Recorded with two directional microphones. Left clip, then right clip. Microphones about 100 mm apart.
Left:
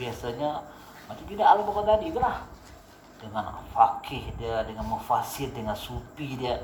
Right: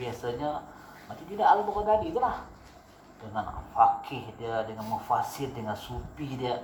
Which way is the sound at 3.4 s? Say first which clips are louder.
Left 2 dB; 35° left (ahead or behind).